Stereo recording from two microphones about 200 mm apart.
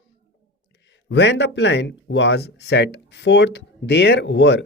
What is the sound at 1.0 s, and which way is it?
Speech, 60° left (ahead or behind).